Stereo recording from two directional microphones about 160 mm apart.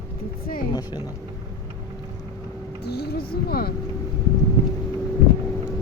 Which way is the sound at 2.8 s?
90° left.